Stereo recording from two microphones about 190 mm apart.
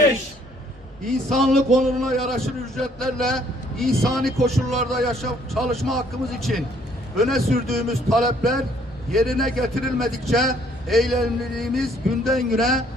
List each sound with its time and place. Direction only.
1.0 s a man's voice: centre (ahead or behind)